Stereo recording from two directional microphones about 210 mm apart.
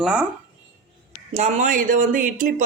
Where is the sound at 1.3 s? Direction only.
35° right (ahead or behind).